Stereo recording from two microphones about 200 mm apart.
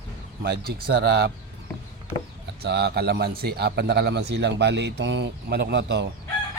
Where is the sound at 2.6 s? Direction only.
55° right (ahead or behind).